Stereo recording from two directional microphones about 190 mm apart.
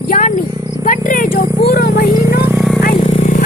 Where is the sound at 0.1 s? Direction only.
45° left (ahead or behind).